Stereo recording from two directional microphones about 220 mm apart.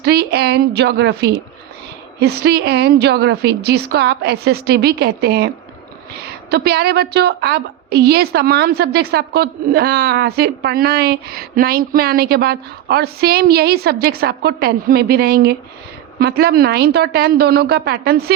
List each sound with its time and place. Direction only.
0.0 s a woman's voice: 50° right (ahead or behind)
6.5 s a woman's voice: 45° right (ahead or behind)